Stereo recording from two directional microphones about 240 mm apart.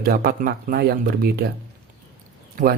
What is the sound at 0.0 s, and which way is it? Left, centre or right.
Speech, right.